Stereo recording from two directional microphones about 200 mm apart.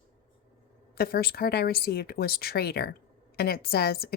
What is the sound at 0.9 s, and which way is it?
Speech, 50° left (ahead or behind).